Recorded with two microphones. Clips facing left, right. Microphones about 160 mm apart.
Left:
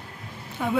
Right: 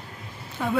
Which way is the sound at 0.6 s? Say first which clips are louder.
Even; 10° left (ahead or behind).